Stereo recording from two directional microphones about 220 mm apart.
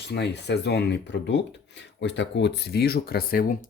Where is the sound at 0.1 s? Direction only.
50° left (ahead or behind).